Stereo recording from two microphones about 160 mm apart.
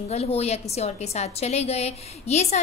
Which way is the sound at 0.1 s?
40° left (ahead or behind).